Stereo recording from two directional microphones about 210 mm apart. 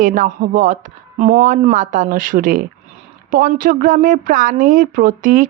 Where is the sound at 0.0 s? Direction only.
40° right (ahead or behind).